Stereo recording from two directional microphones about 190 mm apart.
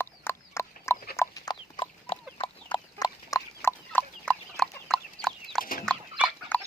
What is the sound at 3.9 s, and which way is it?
Chicken, 5° left (ahead or behind).